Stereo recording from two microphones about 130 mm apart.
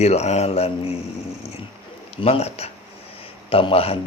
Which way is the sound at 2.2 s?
50° left (ahead or behind).